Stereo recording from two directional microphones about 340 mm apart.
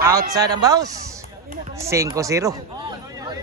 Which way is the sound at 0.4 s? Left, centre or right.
Centre.